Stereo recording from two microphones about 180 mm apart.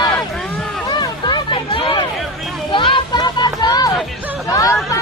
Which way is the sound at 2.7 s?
25° left (ahead or behind).